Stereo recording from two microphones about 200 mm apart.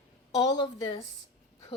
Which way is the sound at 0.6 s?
25° left (ahead or behind).